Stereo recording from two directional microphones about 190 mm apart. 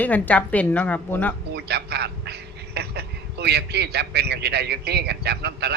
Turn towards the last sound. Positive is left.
turn(degrees=-60)  # may be behind; listen again after turning